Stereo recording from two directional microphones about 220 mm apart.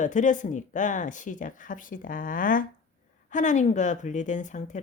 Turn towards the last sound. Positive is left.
turn(degrees=35)  # may be behind; listen again after turning